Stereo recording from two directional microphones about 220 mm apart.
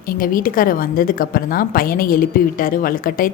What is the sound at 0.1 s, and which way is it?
A woman's voice, 40° left (ahead or behind).